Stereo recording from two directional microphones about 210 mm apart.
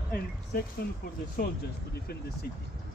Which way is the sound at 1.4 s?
45° left (ahead or behind).